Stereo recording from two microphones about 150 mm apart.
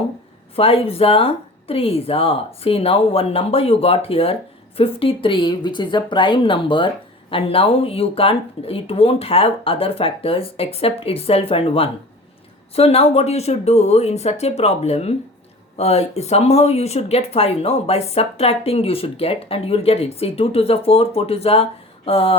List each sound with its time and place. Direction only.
0.5 s speech: 40° left (ahead or behind)